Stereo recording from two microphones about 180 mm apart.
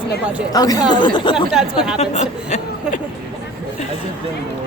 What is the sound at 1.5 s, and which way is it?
Speech, 5° right (ahead or behind).